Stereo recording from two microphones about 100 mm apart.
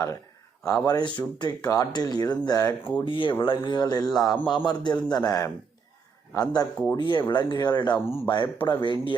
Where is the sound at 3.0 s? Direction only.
55° left (ahead or behind).